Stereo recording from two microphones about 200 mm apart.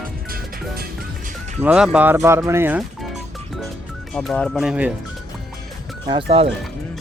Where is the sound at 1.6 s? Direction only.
5° right (ahead or behind).